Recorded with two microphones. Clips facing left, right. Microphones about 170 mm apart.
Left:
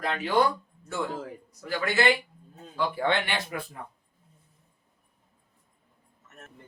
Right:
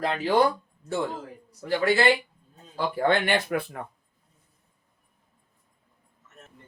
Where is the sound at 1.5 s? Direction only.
30° right (ahead or behind).